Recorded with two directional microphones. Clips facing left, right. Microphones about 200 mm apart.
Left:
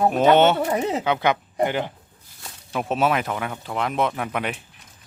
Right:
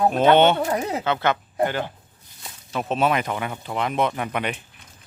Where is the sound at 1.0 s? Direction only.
15° left (ahead or behind).